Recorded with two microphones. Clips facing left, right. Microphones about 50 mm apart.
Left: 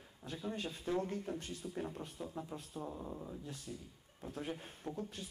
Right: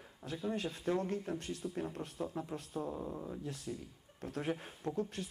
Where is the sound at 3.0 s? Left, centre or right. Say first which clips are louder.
Right 4 dB; right.